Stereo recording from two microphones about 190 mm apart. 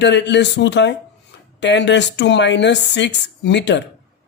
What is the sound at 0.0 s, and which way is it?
A woman's voice, 65° left (ahead or behind).